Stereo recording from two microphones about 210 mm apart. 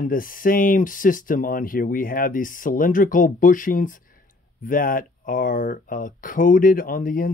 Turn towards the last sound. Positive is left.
turn(degrees=40)  # may be behind; listen again after turning